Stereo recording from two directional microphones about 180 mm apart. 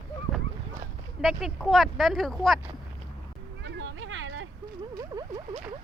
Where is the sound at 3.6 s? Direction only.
85° right.